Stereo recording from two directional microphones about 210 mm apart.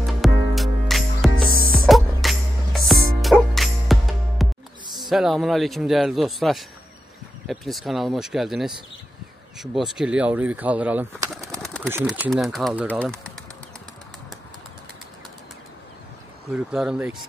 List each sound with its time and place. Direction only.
0.0 s music: centre (ahead or behind)
1.4 s music: 45° right (ahead or behind)
1.9 s music: centre (ahead or behind)
4.9 s speech: centre (ahead or behind)
11.5 s pigeon: 5° left (ahead or behind)
11.9 s speech: 5° right (ahead or behind)
16.4 s speech: centre (ahead or behind)